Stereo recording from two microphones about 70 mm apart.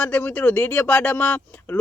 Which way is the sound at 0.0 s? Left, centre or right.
Left.